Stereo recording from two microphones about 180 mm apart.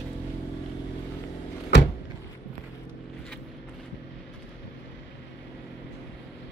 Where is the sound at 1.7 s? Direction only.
75° left (ahead or behind).